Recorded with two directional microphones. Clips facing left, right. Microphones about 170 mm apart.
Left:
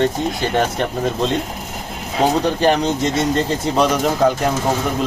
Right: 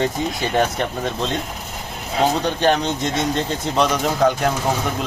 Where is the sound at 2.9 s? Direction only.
5° left (ahead or behind).